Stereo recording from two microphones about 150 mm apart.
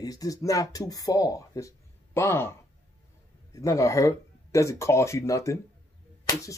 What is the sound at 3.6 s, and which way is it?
Speech, 20° left (ahead or behind).